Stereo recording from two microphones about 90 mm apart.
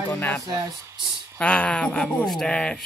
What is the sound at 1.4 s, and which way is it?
Speech, 15° left (ahead or behind).